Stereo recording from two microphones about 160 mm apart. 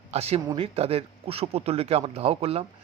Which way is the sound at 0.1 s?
40° right (ahead or behind).